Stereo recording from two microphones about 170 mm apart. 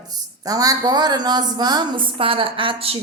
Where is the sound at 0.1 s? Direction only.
20° right (ahead or behind).